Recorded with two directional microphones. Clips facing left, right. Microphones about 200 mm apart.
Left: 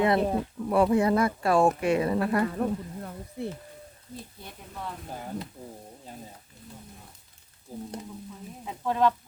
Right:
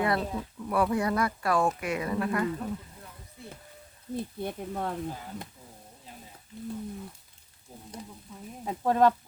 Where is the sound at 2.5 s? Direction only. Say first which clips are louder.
Left 7 dB; 60° left (ahead or behind).